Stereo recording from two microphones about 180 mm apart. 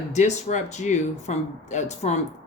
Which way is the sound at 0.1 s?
40° left (ahead or behind).